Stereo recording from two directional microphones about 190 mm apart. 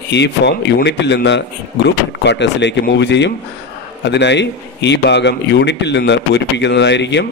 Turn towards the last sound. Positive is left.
turn(degrees=65)  # may be behind; listen again after turning